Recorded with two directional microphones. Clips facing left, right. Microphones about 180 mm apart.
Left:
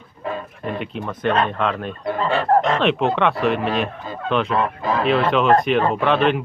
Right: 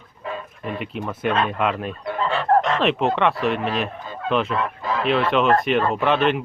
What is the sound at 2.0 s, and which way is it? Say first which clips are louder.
Speech: left 2 dB; 40° left (ahead or behind).